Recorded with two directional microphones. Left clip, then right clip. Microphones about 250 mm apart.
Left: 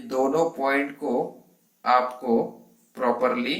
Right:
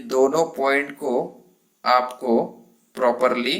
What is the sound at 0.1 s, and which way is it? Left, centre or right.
A man's voice, right.